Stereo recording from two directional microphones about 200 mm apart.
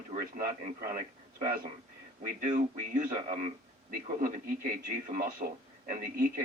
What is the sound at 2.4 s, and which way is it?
A man's voice, 40° right (ahead or behind).